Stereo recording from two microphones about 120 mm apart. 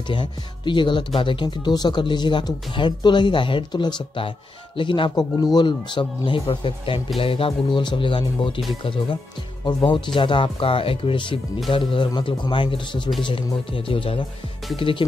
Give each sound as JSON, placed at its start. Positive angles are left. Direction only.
{"t": 0.1, "sound": "speech", "side_deg": 40}